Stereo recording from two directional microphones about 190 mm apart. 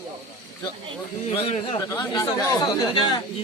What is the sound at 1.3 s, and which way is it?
Speech, 30° left (ahead or behind).